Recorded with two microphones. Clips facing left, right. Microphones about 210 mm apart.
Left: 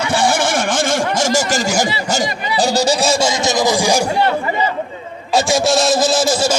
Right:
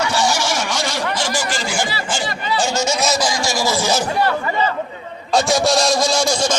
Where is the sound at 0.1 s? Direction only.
55° left (ahead or behind).